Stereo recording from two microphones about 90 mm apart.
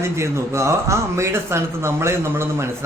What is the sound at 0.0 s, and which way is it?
Speech, 30° right (ahead or behind).